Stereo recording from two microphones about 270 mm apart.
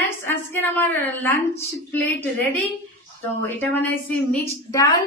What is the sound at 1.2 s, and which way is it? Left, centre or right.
Speech, centre.